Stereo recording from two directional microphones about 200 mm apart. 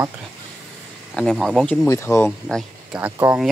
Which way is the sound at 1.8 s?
15° left (ahead or behind).